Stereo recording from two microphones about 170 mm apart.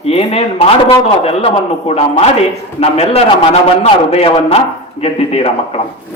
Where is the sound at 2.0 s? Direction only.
35° left (ahead or behind).